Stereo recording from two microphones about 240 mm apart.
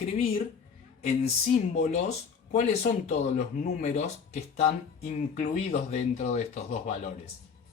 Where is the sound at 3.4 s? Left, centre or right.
Left.